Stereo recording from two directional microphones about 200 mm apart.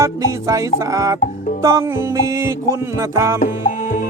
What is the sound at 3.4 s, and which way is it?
Music, 45° left (ahead or behind).